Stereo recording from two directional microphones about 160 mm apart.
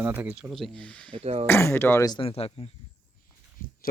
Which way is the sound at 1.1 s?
40° right (ahead or behind).